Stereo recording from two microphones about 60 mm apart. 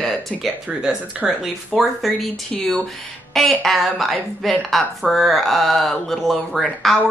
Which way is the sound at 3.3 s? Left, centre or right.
Centre.